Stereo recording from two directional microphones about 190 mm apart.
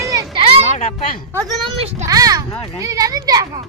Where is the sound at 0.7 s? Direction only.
35° left (ahead or behind).